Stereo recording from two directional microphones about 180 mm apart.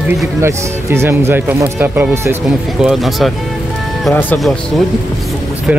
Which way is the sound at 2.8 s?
Centre (ahead or behind).